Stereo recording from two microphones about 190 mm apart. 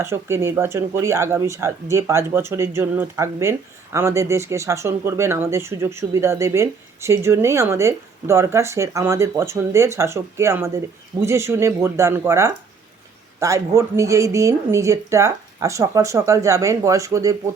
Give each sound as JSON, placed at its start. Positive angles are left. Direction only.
{"t": 0.0, "sound": "speech", "side_deg": -15}